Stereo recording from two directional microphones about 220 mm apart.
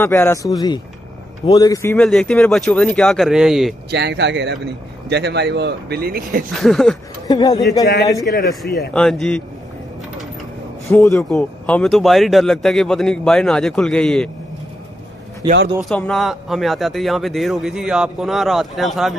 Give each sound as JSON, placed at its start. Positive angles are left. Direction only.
{"t": 0.0, "sound": "speech", "side_deg": 10}
{"t": 3.9, "sound": "a man's voice", "side_deg": -50}
{"t": 6.5, "sound": "speech", "side_deg": 0}
{"t": 7.2, "sound": "speech", "side_deg": 15}
{"t": 8.3, "sound": "speech", "side_deg": 45}
{"t": 8.9, "sound": "speech", "side_deg": 5}
{"t": 10.9, "sound": "speech", "side_deg": 10}
{"t": 15.8, "sound": "speech", "side_deg": 0}